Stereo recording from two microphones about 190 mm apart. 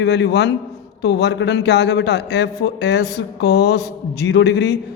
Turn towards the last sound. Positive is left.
turn(degrees=60)  # may be behind; listen again after turning